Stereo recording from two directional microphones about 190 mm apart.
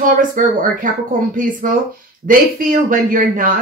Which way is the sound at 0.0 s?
45° right (ahead or behind).